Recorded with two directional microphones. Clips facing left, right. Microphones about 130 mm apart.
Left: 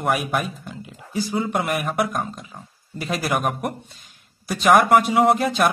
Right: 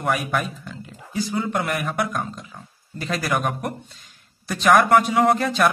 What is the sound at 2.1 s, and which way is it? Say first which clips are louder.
Speech: left 1 dB; 15° left (ahead or behind).